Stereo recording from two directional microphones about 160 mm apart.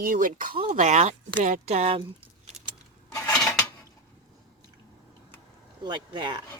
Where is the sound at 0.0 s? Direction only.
55° right (ahead or behind).